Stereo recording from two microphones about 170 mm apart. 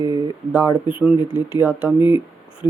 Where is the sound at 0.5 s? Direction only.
10° right (ahead or behind).